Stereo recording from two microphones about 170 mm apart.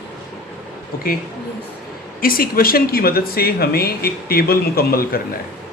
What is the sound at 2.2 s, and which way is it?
Speech, 60° left (ahead or behind).